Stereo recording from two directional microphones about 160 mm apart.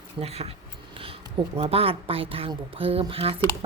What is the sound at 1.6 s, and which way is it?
A woman's voice, 35° right (ahead or behind).